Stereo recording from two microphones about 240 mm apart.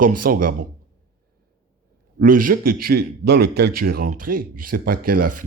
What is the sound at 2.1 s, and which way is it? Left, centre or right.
Speech, right.